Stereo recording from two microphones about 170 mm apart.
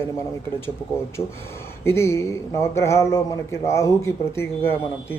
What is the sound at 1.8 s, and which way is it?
Speech, 15° left (ahead or behind).